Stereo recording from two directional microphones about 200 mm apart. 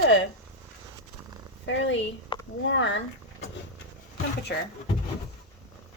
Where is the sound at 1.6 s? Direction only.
70° left (ahead or behind).